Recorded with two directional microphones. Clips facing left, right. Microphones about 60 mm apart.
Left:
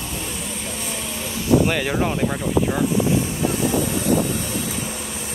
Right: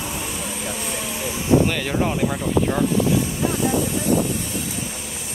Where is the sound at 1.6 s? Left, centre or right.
Centre.